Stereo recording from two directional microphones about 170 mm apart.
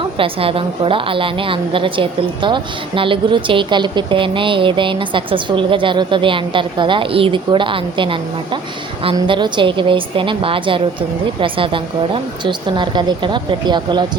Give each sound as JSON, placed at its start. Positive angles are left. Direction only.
{"t": 0.2, "sound": "a woman's voice", "side_deg": -35}